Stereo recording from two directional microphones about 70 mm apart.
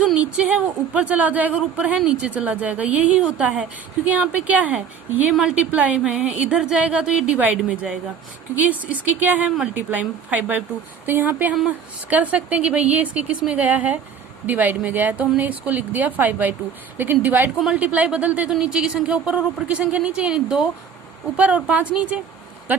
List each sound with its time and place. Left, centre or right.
0.2 s a woman's voice: right
5.3 s a woman's voice: centre
5.5 s a woman's voice: centre